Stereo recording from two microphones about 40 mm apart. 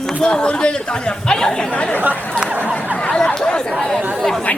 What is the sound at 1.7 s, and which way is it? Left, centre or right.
Speech, left.